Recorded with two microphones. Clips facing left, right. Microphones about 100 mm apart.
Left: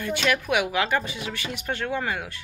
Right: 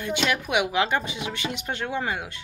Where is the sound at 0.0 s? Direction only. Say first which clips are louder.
Left 1 dB; 20° right (ahead or behind).